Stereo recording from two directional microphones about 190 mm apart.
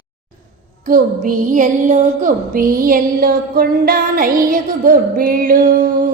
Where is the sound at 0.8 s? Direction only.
45° right (ahead or behind).